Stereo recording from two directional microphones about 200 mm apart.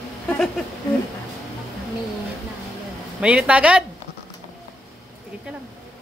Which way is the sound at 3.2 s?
5° right (ahead or behind).